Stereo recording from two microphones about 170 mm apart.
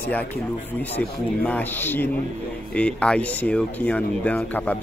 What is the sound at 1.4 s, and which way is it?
Speech, 10° left (ahead or behind).